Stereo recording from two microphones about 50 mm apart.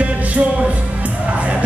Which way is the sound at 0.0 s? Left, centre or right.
Right.